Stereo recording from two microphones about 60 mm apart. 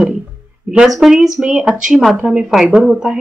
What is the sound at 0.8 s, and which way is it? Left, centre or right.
Speech, centre.